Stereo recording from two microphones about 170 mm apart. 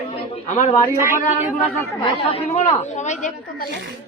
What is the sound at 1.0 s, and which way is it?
Speech, 15° right (ahead or behind).